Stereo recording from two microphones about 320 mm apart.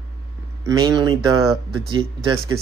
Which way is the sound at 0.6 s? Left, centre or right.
Centre.